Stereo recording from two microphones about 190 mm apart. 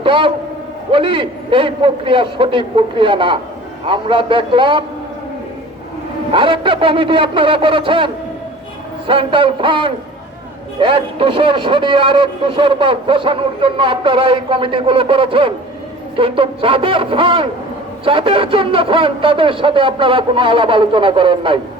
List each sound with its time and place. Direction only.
0.0 s a man's voice: 30° right (ahead or behind)
6.3 s a man's voice: 25° right (ahead or behind)